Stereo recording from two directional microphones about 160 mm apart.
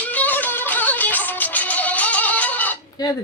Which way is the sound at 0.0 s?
10° left (ahead or behind).